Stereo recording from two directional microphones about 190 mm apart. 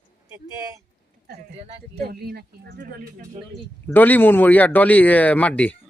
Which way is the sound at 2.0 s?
55° right (ahead or behind).